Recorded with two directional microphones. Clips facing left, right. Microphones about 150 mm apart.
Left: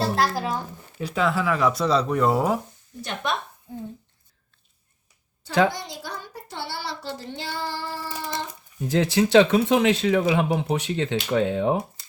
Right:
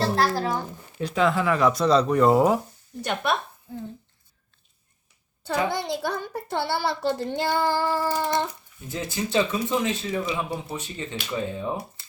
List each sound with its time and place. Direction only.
0.0 s speech: 10° left (ahead or behind)
5.7 s speech: 60° right (ahead or behind)
8.9 s speech: 80° left